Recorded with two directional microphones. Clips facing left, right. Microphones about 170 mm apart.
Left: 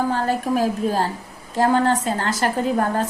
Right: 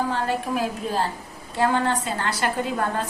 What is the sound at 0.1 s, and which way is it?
A woman's voice, 40° left (ahead or behind).